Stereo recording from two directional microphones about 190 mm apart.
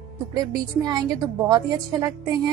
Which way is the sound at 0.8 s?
20° right (ahead or behind).